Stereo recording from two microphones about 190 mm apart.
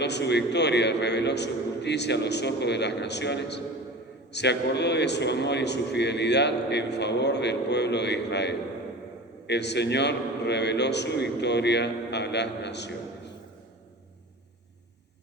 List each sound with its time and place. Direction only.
0.0 s a man's voice: 65° left (ahead or behind)